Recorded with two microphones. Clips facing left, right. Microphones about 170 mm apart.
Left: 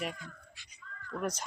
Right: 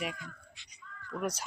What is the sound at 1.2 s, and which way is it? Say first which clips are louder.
Speech: even; 10° right (ahead or behind).